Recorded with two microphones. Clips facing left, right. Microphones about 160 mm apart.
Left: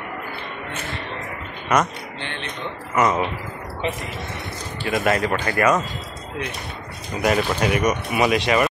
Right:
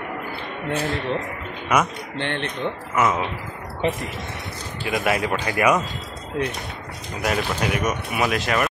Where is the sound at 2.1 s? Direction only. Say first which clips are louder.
Right 6 dB; 65° right (ahead or behind).